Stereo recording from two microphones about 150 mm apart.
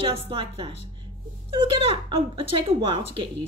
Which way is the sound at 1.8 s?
35° right (ahead or behind).